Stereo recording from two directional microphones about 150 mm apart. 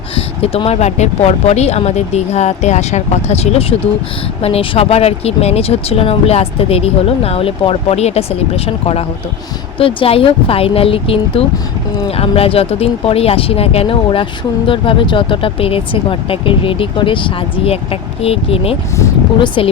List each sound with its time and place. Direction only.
0.4 s speech: 40° left (ahead or behind)
18.2 s speech: 40° left (ahead or behind)